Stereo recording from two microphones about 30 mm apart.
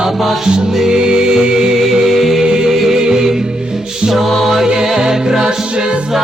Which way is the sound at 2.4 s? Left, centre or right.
Right.